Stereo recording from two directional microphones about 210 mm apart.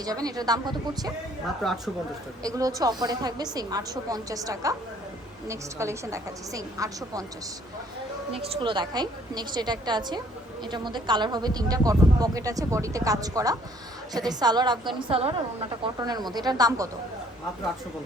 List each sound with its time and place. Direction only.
0.0 s speech: 15° right (ahead or behind)
1.6 s speech: centre (ahead or behind)
2.4 s speech: 15° right (ahead or behind)
8.6 s a woman's voice: 20° right (ahead or behind)